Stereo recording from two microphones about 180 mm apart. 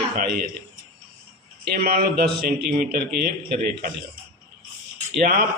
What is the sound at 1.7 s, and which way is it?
A man's voice, 55° right (ahead or behind).